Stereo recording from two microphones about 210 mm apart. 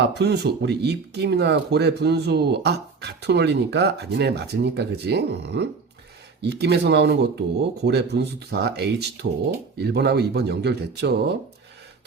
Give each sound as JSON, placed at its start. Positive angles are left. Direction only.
{"t": 0.0, "sound": "speech", "side_deg": -55}